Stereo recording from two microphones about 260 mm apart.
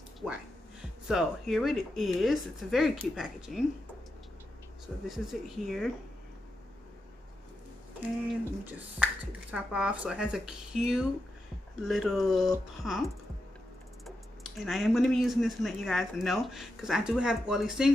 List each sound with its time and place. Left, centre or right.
1.0 s speech: centre
5.0 s speech: centre
8.3 s speech: centre
14.0 s speech: centre